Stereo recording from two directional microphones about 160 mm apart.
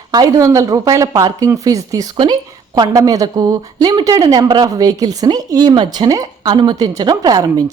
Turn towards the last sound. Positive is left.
turn(degrees=-25)  # may be behind; listen again after turning